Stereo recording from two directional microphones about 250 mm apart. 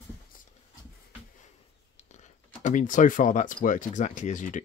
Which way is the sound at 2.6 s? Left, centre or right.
Left.